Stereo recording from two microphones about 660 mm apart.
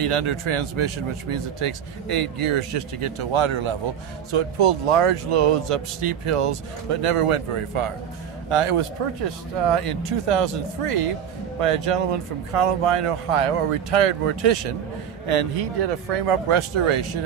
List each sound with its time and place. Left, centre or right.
0.0 s speech: right